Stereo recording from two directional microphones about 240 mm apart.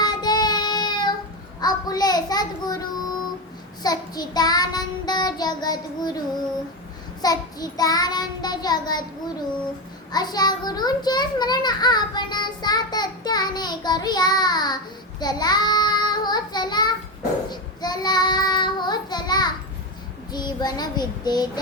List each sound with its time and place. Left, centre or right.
0.0 s child singing: centre
3.8 s child singing: centre
7.2 s child singing: centre
10.1 s a child's voice: centre
15.2 s child singing: centre